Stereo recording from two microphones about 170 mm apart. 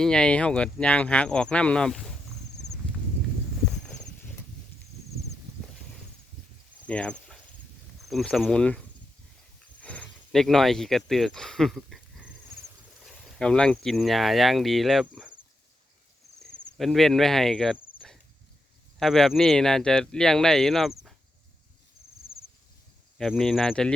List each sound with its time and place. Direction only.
0.0 s speech: 5° left (ahead or behind)
3.7 s horse: 5° left (ahead or behind)
6.8 s cricket: 5° left (ahead or behind)
8.0 s speech: centre (ahead or behind)
9.8 s speech: 10° left (ahead or behind)
16.7 s speech: centre (ahead or behind)
18.0 s chop: 5° left (ahead or behind)
18.9 s speech: centre (ahead or behind)
23.1 s speech: centre (ahead or behind)